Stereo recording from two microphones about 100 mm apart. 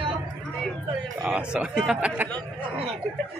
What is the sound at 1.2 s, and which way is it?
Speech, 10° right (ahead or behind).